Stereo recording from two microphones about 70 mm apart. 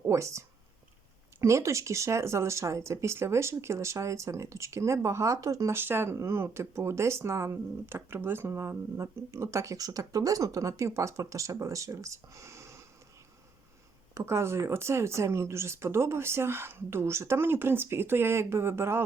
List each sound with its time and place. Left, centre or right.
0.0 s speech: right
5.7 s speech: right
14.1 s speech: right